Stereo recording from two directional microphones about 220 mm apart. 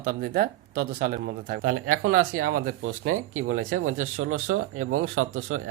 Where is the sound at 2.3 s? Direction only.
75° right (ahead or behind).